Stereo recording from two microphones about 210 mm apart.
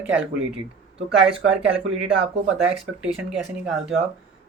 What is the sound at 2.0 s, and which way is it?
Speech, 5° right (ahead or behind).